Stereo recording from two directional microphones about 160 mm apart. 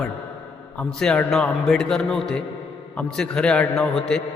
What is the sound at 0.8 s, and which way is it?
A man's voice, 5° left (ahead or behind).